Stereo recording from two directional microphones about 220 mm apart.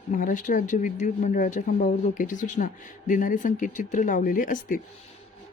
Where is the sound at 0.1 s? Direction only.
35° left (ahead or behind).